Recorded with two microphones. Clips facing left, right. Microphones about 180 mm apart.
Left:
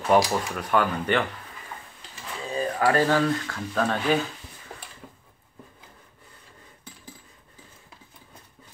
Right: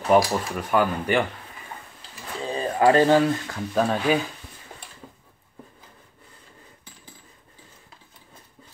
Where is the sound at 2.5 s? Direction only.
25° right (ahead or behind).